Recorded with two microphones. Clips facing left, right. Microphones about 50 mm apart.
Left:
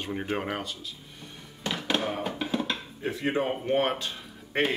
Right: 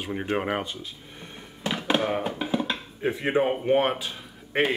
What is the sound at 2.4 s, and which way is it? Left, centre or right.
Dishes, centre.